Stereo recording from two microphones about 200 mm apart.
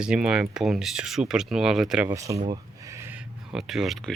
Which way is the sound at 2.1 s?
15° right (ahead or behind).